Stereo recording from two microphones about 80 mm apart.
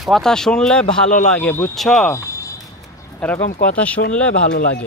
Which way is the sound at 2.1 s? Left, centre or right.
Left.